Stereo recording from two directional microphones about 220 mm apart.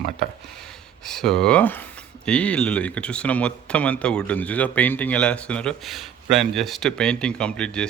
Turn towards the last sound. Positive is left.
turn(degrees=5)  # may be behind; listen again after turning